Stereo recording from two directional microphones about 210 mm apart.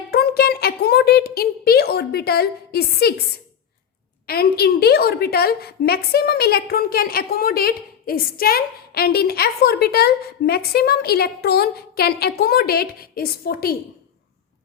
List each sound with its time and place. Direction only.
0.1 s a woman's voice: 50° left (ahead or behind)
4.3 s a woman's voice: 45° left (ahead or behind)